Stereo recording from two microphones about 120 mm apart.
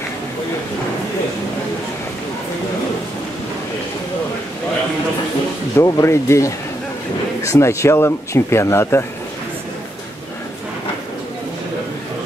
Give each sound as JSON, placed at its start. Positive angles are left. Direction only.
{"t": 5.8, "sound": "speech", "side_deg": 20}